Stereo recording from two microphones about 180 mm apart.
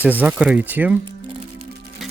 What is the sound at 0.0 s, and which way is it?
Speech, 10° right (ahead or behind).